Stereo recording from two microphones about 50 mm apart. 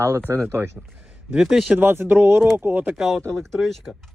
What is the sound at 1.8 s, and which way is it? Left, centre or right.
Speech, right.